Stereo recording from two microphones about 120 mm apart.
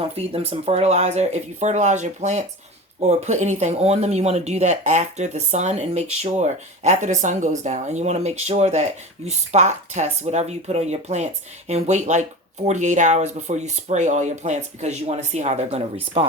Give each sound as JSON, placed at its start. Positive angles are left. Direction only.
{"t": 0.1, "sound": "speech", "side_deg": -55}